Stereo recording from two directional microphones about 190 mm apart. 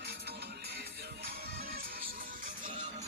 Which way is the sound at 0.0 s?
60° right (ahead or behind).